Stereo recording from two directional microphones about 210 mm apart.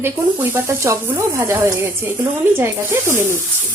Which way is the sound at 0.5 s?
10° right (ahead or behind).